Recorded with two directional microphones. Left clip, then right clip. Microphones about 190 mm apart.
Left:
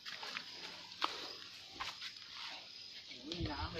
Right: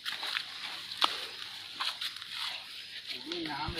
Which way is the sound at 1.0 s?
55° right (ahead or behind).